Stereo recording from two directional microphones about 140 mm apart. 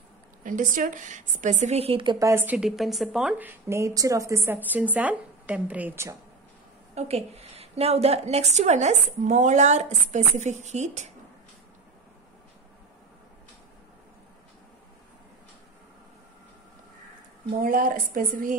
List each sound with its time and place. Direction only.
0.4 s a woman's voice: 70° right (ahead or behind); by 2.1 s 40° right (ahead or behind)
2.1 s a woman's voice: 20° right (ahead or behind)
7.0 s a woman's voice: 50° right (ahead or behind)
17.6 s a woman's voice: 85° right